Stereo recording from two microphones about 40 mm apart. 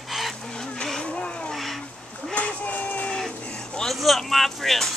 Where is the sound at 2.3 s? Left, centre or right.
Left.